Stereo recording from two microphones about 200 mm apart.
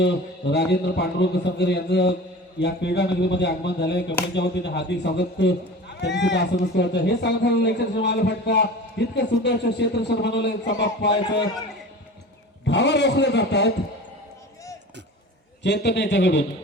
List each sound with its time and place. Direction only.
0.0 s speech: 60° left (ahead or behind)
12.6 s speech: 60° left (ahead or behind)
15.6 s speech: 55° left (ahead or behind)